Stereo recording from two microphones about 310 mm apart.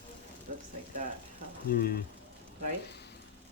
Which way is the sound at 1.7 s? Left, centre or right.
Left.